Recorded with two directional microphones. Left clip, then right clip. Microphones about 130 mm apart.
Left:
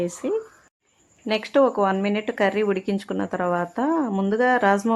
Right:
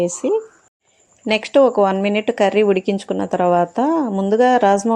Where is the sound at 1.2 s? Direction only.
40° right (ahead or behind).